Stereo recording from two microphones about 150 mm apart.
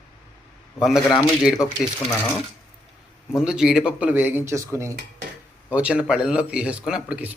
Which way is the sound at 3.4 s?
5° right (ahead or behind).